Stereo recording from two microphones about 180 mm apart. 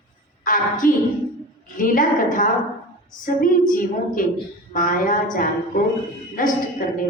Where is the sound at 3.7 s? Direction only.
50° left (ahead or behind).